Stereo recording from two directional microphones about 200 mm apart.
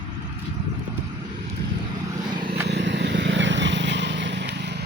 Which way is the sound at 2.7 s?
65° right (ahead or behind).